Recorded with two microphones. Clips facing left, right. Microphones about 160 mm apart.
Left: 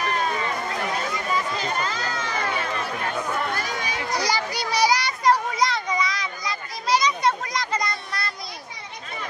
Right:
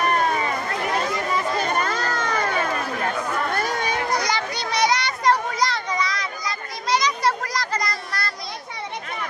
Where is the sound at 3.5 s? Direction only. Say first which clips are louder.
Right 5 dB; 55° right (ahead or behind).